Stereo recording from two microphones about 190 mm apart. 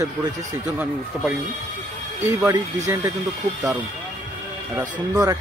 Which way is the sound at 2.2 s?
15° right (ahead or behind).